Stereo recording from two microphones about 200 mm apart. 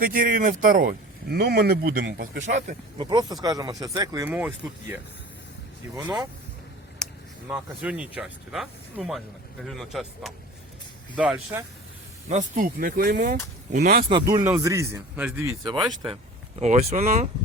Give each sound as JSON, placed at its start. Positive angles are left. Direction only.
{"t": 0.0, "sound": "speech", "side_deg": -45}
{"t": 3.0, "sound": "speech", "side_deg": -20}
{"t": 6.0, "sound": "speech", "side_deg": -10}
{"t": 7.4, "sound": "speech", "side_deg": -5}
{"t": 12.3, "sound": "speech", "side_deg": -40}
{"t": 14.1, "sound": "speech", "side_deg": -20}
{"t": 16.6, "sound": "speech", "side_deg": -35}